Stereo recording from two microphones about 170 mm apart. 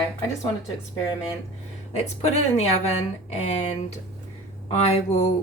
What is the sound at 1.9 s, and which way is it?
Speech, 40° left (ahead or behind).